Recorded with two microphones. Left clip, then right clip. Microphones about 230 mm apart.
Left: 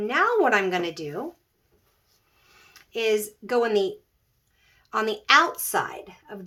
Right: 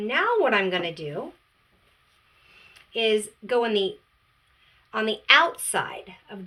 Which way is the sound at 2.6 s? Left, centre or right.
Left.